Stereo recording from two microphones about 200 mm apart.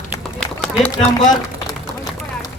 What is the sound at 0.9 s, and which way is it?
Speech, 20° left (ahead or behind).